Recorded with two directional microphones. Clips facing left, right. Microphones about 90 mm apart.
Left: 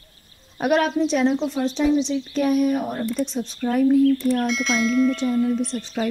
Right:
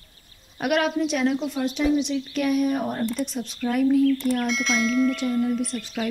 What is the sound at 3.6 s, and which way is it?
Speech, 30° left (ahead or behind).